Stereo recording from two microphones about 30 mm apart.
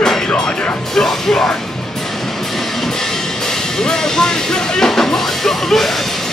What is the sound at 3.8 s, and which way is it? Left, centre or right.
Music, centre.